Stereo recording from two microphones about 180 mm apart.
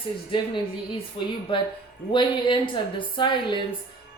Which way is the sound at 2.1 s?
25° left (ahead or behind).